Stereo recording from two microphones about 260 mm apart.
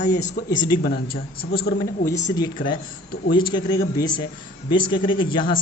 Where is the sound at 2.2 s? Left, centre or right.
Centre.